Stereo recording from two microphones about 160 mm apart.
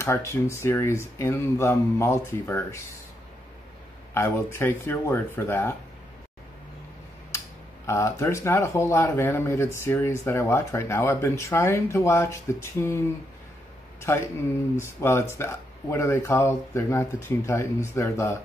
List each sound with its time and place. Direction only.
0.0 s speech: 20° left (ahead or behind)
4.1 s speech: 15° left (ahead or behind)
7.3 s speech: 20° left (ahead or behind)
14.1 s speech: 15° left (ahead or behind)